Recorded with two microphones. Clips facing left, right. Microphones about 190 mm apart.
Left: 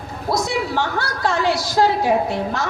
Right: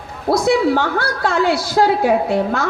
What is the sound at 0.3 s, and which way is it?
A woman's voice, 55° right (ahead or behind).